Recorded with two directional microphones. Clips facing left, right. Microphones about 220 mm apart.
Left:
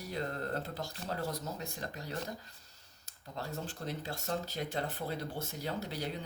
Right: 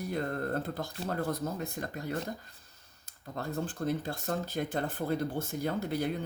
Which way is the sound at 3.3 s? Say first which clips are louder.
Right 6 dB; 55° right (ahead or behind).